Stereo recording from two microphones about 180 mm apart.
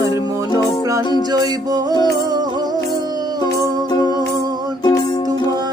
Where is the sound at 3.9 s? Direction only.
20° left (ahead or behind).